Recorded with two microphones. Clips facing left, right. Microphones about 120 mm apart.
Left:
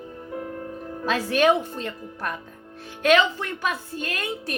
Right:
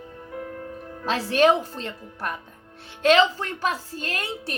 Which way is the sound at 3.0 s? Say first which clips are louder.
Right 1 dB; 35° right (ahead or behind).